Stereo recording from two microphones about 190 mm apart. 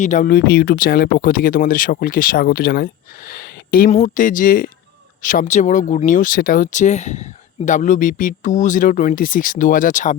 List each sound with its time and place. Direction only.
0.0 s speech: 40° left (ahead or behind)
3.8 s speech: 40° left (ahead or behind)